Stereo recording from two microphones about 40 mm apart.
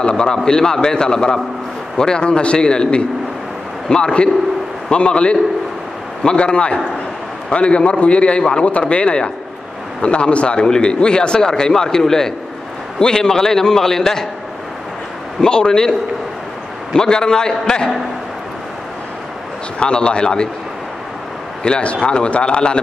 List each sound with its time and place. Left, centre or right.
0.0 s a man's voice: centre
15.4 s a man's voice: centre
16.9 s a man's voice: centre
19.8 s a man's voice: left
21.6 s a man's voice: left